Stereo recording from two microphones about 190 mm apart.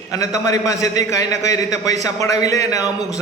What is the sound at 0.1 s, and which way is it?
A man's voice, 15° left (ahead or behind).